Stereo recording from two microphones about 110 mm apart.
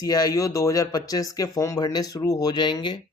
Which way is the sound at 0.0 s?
35° left (ahead or behind).